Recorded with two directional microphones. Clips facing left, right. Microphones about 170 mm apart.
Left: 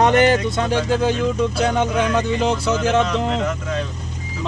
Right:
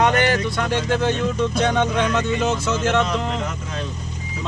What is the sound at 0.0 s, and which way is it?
Music, 25° left (ahead or behind).